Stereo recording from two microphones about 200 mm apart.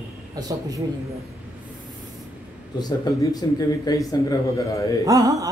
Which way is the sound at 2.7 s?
20° left (ahead or behind).